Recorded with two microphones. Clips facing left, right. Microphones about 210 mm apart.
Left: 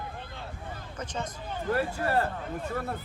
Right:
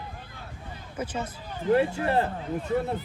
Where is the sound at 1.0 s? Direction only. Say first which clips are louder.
Right 4 dB; 5° right (ahead or behind).